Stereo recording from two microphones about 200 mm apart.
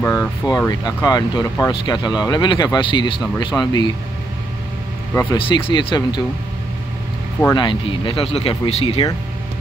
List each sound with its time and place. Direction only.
0.0 s speech: 15° left (ahead or behind)
5.1 s speech: 20° left (ahead or behind)
7.5 s speech: 25° left (ahead or behind)